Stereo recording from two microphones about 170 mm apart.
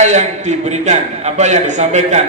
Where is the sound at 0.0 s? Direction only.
45° right (ahead or behind).